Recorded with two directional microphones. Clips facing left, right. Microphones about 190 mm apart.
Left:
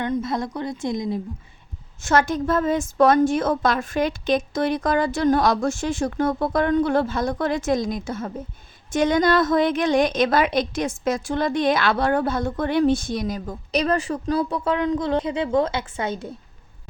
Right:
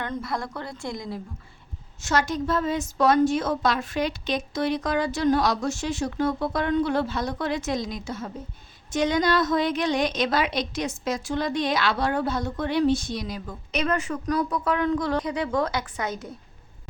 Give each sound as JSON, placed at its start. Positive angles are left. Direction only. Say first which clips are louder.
{"t": 0.0, "sound": "a woman's voice", "louder": "left 6 dB", "side_deg": 20}
{"t": 2.0, "sound": "a woman's voice", "louder": "left 4 dB", "side_deg": 55}